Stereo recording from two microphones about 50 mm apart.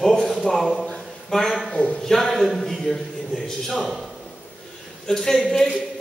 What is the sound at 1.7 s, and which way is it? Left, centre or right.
Speech, left.